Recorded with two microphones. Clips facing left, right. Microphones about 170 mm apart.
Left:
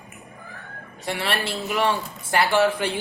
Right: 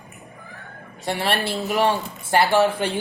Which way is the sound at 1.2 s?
40° right (ahead or behind).